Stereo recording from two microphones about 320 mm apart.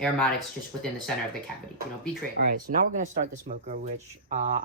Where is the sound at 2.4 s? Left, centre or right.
Right.